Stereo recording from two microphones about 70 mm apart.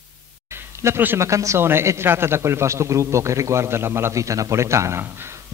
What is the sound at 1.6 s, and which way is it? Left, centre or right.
A man's voice, right.